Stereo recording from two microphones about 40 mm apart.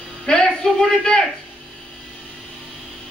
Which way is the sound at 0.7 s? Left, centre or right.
Centre.